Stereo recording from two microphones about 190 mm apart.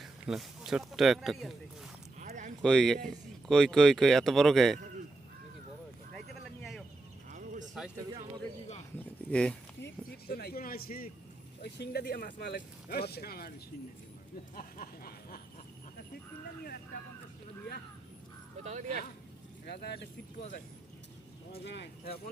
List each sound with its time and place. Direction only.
0.0 s speech: centre (ahead or behind)
2.1 s a sound: 40° right (ahead or behind)
2.6 s speech: 5° left (ahead or behind)
6.6 s a sound: centre (ahead or behind)
7.3 s a sound: 40° right (ahead or behind)
9.3 s speech: 5° left (ahead or behind)
9.8 s speech: 55° left (ahead or behind)
14.5 s speech: 45° left (ahead or behind)
18.6 s speech: 40° right (ahead or behind)
19.6 s speech: 60° left (ahead or behind)
21.5 s speech: 65° left (ahead or behind)